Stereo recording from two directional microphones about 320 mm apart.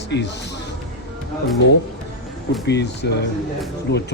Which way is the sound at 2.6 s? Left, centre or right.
Left.